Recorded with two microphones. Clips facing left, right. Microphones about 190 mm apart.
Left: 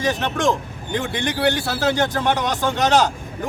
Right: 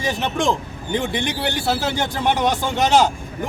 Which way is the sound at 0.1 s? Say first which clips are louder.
Right 1 dB; 15° right (ahead or behind).